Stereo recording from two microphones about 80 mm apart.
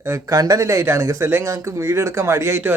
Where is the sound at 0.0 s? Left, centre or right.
Right.